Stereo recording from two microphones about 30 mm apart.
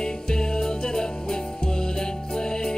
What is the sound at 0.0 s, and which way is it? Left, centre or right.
Music, left.